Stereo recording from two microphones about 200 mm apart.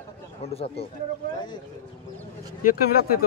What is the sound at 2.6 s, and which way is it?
Speech, 45° left (ahead or behind).